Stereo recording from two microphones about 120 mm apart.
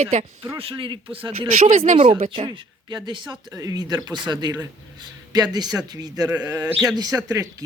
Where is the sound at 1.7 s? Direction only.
90° right.